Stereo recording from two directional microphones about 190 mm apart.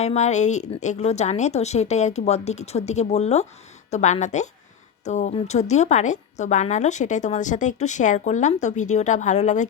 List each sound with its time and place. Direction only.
0.0 s a woman's voice: 35° left (ahead or behind)